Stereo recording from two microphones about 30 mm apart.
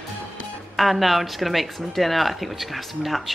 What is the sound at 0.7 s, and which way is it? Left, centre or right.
Speech, centre.